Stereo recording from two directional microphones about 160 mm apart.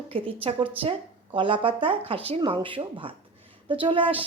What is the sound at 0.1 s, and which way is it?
A woman's voice, 35° right (ahead or behind).